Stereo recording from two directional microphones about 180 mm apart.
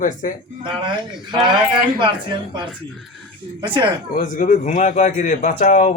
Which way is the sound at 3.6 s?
25° right (ahead or behind).